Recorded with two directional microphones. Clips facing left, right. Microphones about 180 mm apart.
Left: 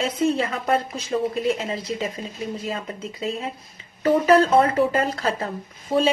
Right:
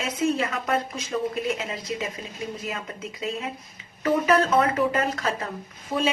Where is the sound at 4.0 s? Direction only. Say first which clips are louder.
Left 4 dB; 30° left (ahead or behind).